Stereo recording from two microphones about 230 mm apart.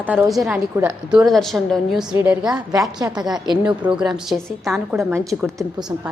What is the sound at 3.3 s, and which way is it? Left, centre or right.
Speech, centre.